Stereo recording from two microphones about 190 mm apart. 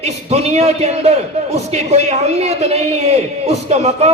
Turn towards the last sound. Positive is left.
turn(degrees=-35)  # may be behind; listen again after turning